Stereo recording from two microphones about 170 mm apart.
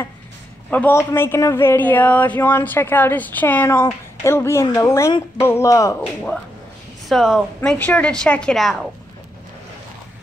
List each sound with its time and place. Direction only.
0.7 s a man's voice: 10° left (ahead or behind)
7.1 s a woman's voice: centre (ahead or behind)